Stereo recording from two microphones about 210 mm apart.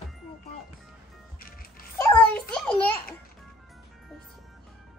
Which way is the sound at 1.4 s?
45° left (ahead or behind).